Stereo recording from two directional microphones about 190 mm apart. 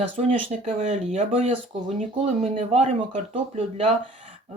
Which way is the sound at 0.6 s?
35° right (ahead or behind).